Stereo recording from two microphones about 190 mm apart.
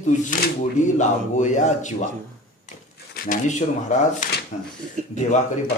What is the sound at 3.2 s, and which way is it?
Speech, 40° left (ahead or behind).